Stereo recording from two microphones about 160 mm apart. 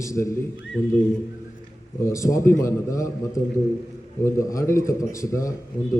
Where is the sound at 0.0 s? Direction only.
20° left (ahead or behind).